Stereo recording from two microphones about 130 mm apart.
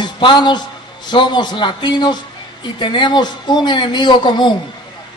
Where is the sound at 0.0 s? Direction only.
35° left (ahead or behind).